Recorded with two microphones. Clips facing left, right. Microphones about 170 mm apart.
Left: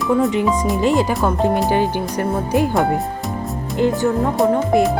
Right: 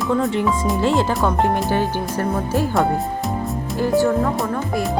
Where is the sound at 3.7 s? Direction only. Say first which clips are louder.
Even; 20° left (ahead or behind).